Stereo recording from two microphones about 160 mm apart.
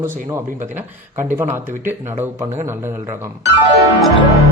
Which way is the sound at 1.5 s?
15° right (ahead or behind).